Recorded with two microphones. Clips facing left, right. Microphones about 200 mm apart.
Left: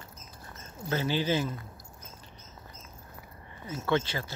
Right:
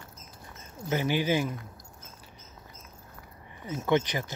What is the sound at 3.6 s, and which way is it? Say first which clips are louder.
Speech: right 3 dB; 15° right (ahead or behind).